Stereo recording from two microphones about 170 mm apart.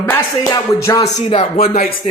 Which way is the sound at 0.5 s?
20° left (ahead or behind).